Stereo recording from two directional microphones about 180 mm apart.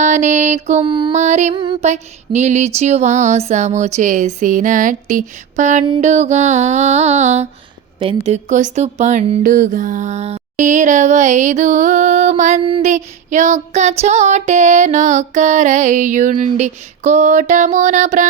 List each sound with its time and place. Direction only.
0.0 s speech: 40° right (ahead or behind)
1.1 s speech: 40° right (ahead or behind)
1.5 s music: 25° right (ahead or behind)
1.9 s speech: 40° right (ahead or behind)